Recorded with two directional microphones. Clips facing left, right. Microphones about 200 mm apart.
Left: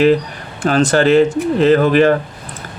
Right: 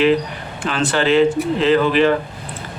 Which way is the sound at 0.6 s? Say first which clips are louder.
Left 6 dB; 40° left (ahead or behind).